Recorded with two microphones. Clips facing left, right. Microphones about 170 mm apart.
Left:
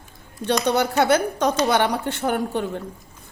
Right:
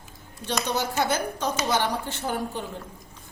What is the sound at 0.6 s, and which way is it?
A woman's voice, 65° left (ahead or behind).